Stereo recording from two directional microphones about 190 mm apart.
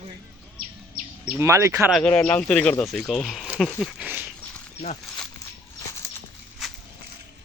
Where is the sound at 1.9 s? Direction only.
5° left (ahead or behind).